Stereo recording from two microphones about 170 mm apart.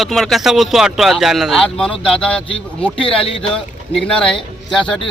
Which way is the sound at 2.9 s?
30° left (ahead or behind).